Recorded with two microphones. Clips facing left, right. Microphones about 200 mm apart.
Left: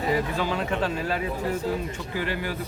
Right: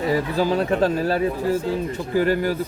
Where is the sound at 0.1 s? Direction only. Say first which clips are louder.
Right 5 dB; 40° right (ahead or behind).